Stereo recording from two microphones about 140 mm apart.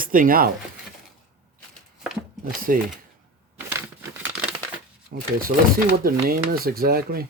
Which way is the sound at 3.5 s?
15° right (ahead or behind).